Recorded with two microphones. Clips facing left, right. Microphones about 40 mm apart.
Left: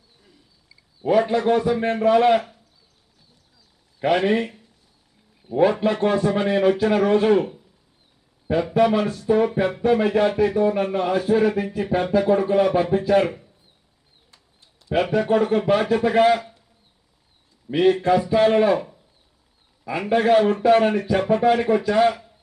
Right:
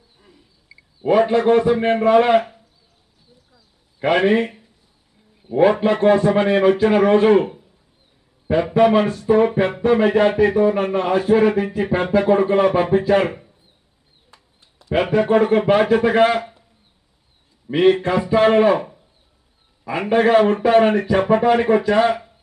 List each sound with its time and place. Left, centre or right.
0.7 s a man's voice: right
4.0 s a man's voice: right
10.2 s speech: right
10.5 s a man's voice: right
17.7 s a man's voice: right